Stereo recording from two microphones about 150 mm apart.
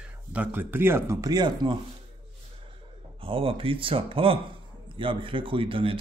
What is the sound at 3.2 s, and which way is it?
Speech, 35° right (ahead or behind).